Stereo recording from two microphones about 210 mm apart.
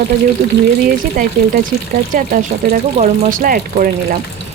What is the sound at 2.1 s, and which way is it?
Speech, 40° right (ahead or behind).